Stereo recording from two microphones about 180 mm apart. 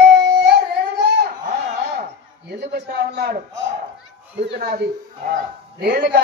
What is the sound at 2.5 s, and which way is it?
Speech, 70° right (ahead or behind).